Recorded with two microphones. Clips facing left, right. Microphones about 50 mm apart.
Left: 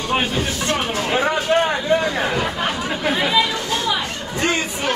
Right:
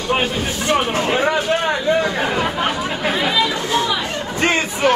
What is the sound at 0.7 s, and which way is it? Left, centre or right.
Speech, centre.